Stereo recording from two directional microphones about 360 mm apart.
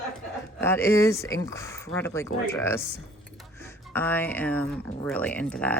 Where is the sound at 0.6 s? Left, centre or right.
Centre.